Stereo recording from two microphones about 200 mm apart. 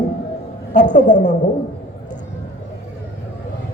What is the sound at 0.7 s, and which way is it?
Speech, 40° left (ahead or behind).